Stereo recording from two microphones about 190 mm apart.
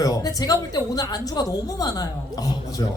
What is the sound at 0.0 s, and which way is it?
Music, 20° left (ahead or behind).